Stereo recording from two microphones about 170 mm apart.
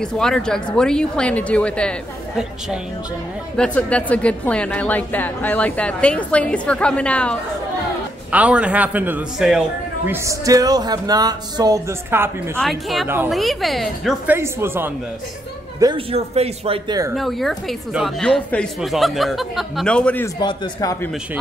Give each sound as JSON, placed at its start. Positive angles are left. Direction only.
{"t": 0.0, "sound": "a woman's voice", "side_deg": 5}
{"t": 8.3, "sound": "a man's voice", "side_deg": -5}
{"t": 12.5, "sound": "speech", "side_deg": 0}
{"t": 14.3, "sound": "a man's voice", "side_deg": -15}
{"t": 16.1, "sound": "speech", "side_deg": -40}
{"t": 17.1, "sound": "speech", "side_deg": 0}
{"t": 20.3, "sound": "a man's voice", "side_deg": 25}